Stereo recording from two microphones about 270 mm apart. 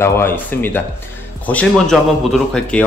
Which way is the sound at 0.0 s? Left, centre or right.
Centre.